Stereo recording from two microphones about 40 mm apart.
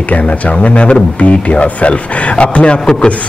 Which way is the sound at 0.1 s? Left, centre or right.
Left.